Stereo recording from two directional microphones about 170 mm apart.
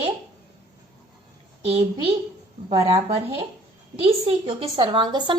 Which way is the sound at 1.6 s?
35° right (ahead or behind).